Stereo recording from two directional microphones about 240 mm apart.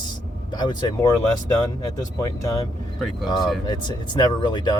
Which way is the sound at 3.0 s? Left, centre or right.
Centre.